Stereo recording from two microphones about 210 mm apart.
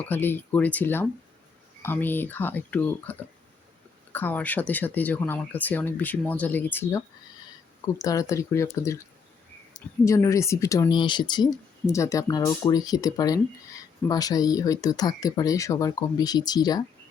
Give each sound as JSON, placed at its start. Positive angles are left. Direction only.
{"t": 0.0, "sound": "speech", "side_deg": 10}
{"t": 10.0, "sound": "speech", "side_deg": 15}